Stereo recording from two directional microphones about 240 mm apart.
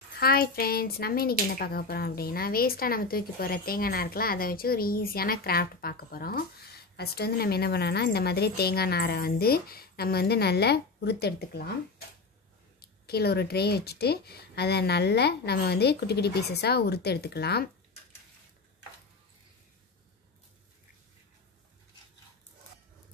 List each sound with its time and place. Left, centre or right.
0.1 s a woman's voice: left
12.8 s speech: left